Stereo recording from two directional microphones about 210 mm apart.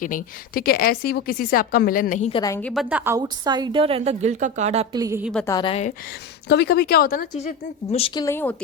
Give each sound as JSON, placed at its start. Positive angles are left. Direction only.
{"t": 0.0, "sound": "a woman's voice", "side_deg": 40}
{"t": 2.3, "sound": "a woman's voice", "side_deg": 15}
{"t": 2.9, "sound": "a woman's voice", "side_deg": -10}
{"t": 4.9, "sound": "a woman's voice", "side_deg": -15}
{"t": 5.2, "sound": "a woman's voice", "side_deg": 5}
{"t": 5.5, "sound": "a woman's voice", "side_deg": 20}
{"t": 6.5, "sound": "speech", "side_deg": 50}